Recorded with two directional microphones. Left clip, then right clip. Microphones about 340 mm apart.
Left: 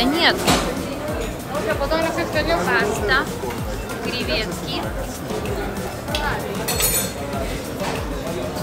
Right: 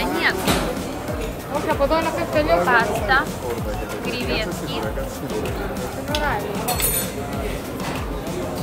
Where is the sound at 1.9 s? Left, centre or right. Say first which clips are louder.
Right 1 dB; right.